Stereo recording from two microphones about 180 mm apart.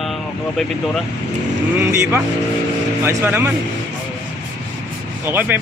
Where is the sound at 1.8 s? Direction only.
15° right (ahead or behind).